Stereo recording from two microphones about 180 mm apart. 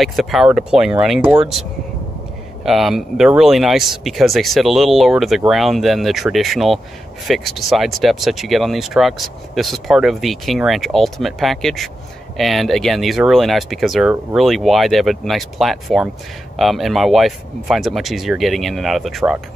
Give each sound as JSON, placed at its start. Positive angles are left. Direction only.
{"t": 0.0, "sound": "speech", "side_deg": 0}
{"t": 1.2, "sound": "speech", "side_deg": -30}
{"t": 2.6, "sound": "speech", "side_deg": 0}